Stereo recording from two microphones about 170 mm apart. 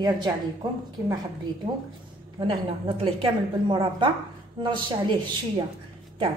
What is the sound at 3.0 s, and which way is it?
A woman's voice, 30° right (ahead or behind).